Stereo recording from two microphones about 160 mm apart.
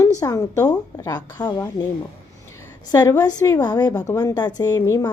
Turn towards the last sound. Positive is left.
turn(degrees=20)  # may be behind; listen again after turning